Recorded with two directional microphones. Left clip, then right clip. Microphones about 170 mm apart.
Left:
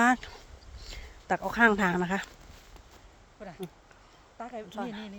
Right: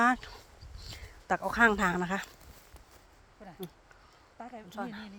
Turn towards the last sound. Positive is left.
turn(degrees=30)  # may be behind; listen again after turning